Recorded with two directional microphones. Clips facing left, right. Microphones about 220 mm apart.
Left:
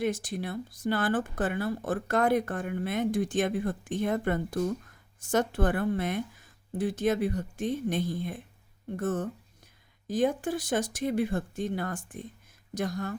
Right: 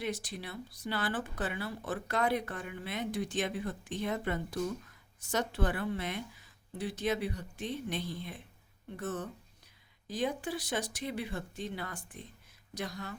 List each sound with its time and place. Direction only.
0.0 s speech: 50° left (ahead or behind)